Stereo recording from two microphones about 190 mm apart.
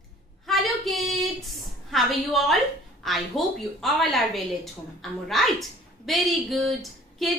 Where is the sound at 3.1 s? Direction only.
Centre (ahead or behind).